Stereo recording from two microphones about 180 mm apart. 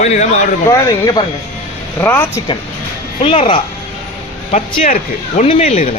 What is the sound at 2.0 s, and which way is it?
Speech, 10° left (ahead or behind).